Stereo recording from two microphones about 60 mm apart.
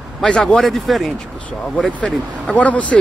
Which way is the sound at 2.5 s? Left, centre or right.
Left.